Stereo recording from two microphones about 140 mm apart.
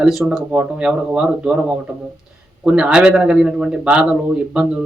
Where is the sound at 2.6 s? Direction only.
5° right (ahead or behind).